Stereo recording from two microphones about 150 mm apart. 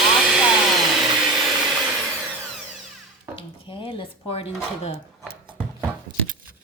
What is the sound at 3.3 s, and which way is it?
Speech, 35° left (ahead or behind).